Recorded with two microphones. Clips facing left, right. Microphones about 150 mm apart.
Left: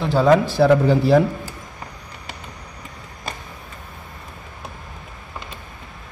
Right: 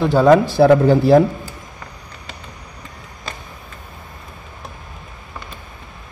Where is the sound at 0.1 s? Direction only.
50° right (ahead or behind).